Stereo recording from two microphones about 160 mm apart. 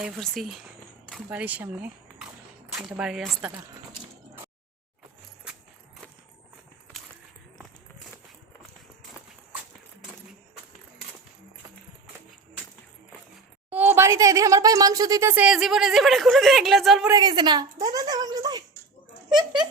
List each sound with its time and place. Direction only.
0.0 s speech: centre (ahead or behind)
13.7 s speech: 10° right (ahead or behind)
17.1 s a woman's voice: 25° right (ahead or behind)